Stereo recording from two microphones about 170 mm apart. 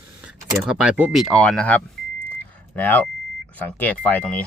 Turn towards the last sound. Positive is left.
turn(degrees=10)  # may be behind; listen again after turning